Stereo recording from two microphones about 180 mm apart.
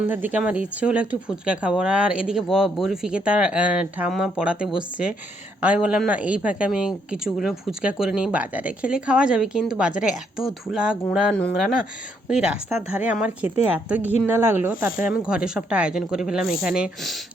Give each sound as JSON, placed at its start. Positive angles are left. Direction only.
{"t": 0.1, "sound": "speech", "side_deg": -10}